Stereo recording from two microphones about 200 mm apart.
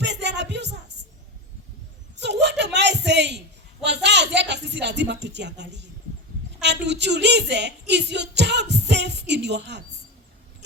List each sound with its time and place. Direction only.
0.0 s music: 60° right (ahead or behind)
2.1 s a sound: 60° right (ahead or behind)
3.8 s a woman's voice: 60° right (ahead or behind)